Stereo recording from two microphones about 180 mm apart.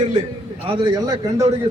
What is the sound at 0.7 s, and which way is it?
Speech, 25° right (ahead or behind).